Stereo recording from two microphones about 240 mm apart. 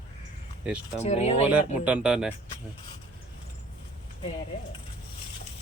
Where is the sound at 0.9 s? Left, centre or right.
Left.